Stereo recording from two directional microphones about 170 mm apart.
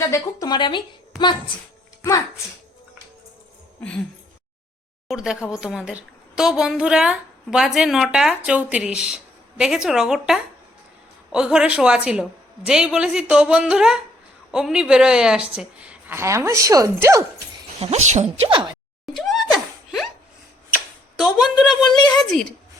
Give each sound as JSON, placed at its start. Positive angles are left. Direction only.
{"t": 0.1, "sound": "speech", "side_deg": 20}
{"t": 3.8, "sound": "speech", "side_deg": 5}
{"t": 5.0, "sound": "a woman's voice", "side_deg": -5}
{"t": 17.7, "sound": "a woman's voice", "side_deg": -40}
{"t": 18.4, "sound": "speech", "side_deg": -25}
{"t": 19.1, "sound": "a sound", "side_deg": 0}
{"t": 21.2, "sound": "a woman's voice", "side_deg": -5}
{"t": 21.8, "sound": "speech", "side_deg": 25}
{"t": 22.2, "sound": "a woman's voice", "side_deg": 5}